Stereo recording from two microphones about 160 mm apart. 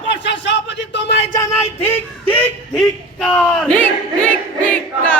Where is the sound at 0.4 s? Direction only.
90° left.